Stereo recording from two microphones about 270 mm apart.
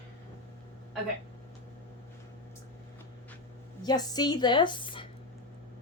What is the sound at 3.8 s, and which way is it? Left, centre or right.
A woman's voice, centre.